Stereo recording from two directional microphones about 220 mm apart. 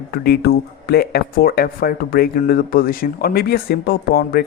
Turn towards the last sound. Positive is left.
turn(degrees=45)  # may be behind; listen again after turning